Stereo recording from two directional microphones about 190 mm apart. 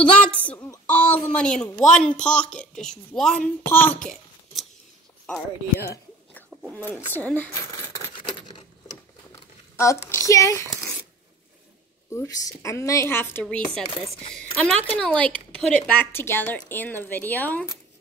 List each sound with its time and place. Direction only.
0.0 s a woman's voice: 5° left (ahead or behind)
2.1 s speech: 40° left (ahead or behind)
2.5 s a child's voice: 5° left (ahead or behind)
6.7 s a sound: 10° left (ahead or behind)
9.8 s a woman's voice: 15° left (ahead or behind)
12.1 s a woman's voice: 15° left (ahead or behind)
13.8 s speech: 25° left (ahead or behind)
14.6 s a woman's voice: 5° left (ahead or behind)